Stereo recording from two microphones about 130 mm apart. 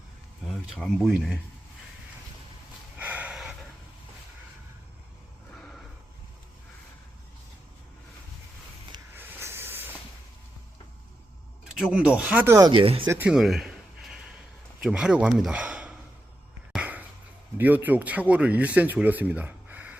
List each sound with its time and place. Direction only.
0.4 s speech: 5° left (ahead or behind)
3.0 s a sound: 10° right (ahead or behind)
5.5 s a sound: 5° left (ahead or behind)
9.1 s hiss: 15° right (ahead or behind)
11.7 s speech: 5° right (ahead or behind)
12.5 s speech: 25° right (ahead or behind)
12.7 s speech: 45° right (ahead or behind)
13.1 s speech: 15° right (ahead or behind)
13.3 s a sound: 5° right (ahead or behind)
14.8 s a man's voice: 5° right (ahead or behind)
16.7 s a sound: 10° right (ahead or behind)
17.6 s speech: 15° right (ahead or behind)